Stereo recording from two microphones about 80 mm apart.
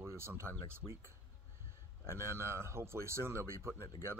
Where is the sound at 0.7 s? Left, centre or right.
Right.